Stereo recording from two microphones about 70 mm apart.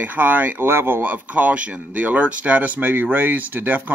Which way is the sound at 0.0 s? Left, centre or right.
Right.